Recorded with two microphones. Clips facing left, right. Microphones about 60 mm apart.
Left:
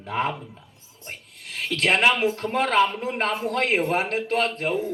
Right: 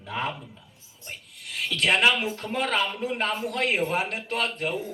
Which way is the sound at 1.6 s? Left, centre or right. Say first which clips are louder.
Left 2 dB; left.